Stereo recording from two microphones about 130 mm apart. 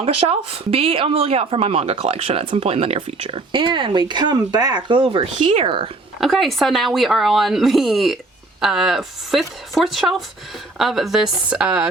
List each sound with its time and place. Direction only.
0.0 s speech: 50° right (ahead or behind)
5.4 s speech: 60° right (ahead or behind)
5.6 s speech: 40° right (ahead or behind)
6.1 s speech: centre (ahead or behind)